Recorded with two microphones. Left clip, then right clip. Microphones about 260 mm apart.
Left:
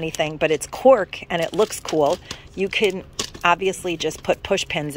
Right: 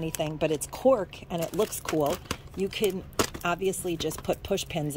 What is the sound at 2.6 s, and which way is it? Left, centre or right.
Speech, centre.